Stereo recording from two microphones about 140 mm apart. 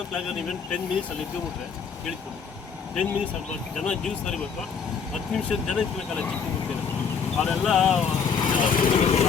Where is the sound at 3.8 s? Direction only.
5° left (ahead or behind).